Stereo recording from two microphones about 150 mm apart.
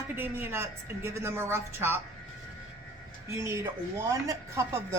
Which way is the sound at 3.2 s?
20° right (ahead or behind).